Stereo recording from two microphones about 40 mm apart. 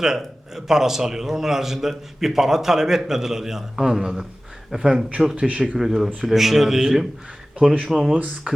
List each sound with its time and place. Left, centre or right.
0.5 s a man's voice: centre
5.5 s speech: right
5.7 s a man's voice: centre
8.0 s speech: right